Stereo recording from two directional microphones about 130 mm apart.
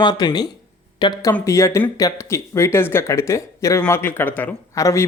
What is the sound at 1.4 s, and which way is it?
Speech, 20° left (ahead or behind).